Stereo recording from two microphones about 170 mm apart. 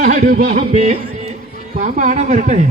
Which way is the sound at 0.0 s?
50° right (ahead or behind).